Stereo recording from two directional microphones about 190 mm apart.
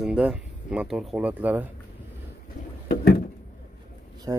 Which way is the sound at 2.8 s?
55° left (ahead or behind).